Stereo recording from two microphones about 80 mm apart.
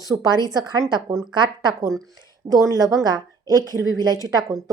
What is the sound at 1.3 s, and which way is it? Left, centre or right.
Speech, right.